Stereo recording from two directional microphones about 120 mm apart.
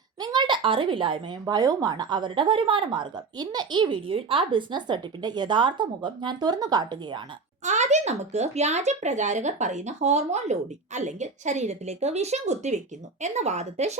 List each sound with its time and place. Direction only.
0.2 s speech: 35° right (ahead or behind)
7.6 s speech: 75° right (ahead or behind)